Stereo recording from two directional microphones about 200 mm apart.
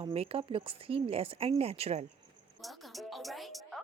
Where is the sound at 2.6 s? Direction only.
Centre (ahead or behind).